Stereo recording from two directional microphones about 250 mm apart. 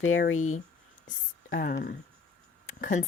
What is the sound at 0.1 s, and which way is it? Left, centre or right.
Speech, left.